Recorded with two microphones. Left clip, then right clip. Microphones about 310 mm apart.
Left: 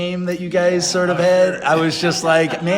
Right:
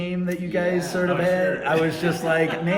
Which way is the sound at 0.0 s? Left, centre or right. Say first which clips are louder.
Left 6 dB; centre.